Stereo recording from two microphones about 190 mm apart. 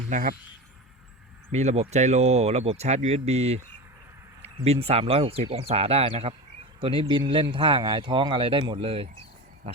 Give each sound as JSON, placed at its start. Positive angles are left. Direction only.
{"t": 0.1, "sound": "speech", "side_deg": -45}
{"t": 1.5, "sound": "speech", "side_deg": -35}
{"t": 4.6, "sound": "speech", "side_deg": -30}